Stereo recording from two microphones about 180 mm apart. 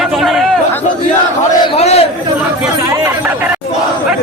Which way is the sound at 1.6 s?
35° left (ahead or behind).